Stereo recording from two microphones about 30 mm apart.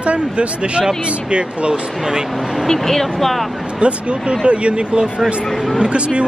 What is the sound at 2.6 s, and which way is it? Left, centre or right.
Speech, centre.